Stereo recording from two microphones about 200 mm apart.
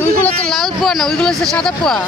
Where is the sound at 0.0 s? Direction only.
5° left (ahead or behind).